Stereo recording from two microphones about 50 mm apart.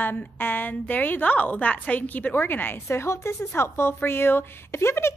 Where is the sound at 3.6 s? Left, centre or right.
Left.